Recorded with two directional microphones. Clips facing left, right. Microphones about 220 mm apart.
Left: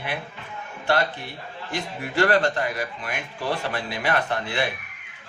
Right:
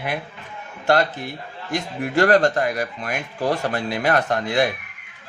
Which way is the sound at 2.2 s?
45° right (ahead or behind).